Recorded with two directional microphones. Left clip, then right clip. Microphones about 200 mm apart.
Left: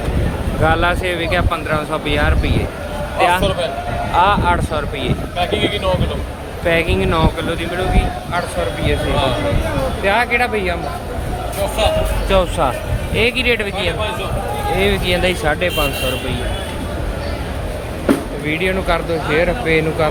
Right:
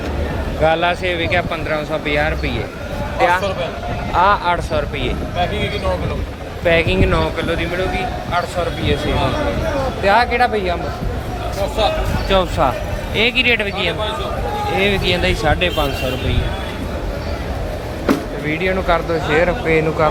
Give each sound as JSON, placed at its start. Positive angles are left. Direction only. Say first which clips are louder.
{"t": 0.6, "sound": "a man's voice", "louder": "even", "side_deg": 5}
{"t": 5.4, "sound": "speech", "louder": "left 3 dB", "side_deg": 25}
{"t": 6.7, "sound": "speech", "louder": "right 1 dB", "side_deg": 0}
{"t": 10.0, "sound": "speech", "louder": "right 2 dB", "side_deg": 0}
{"t": 12.3, "sound": "speech", "louder": "even", "side_deg": 0}
{"t": 18.4, "sound": "speech", "louder": "even", "side_deg": 10}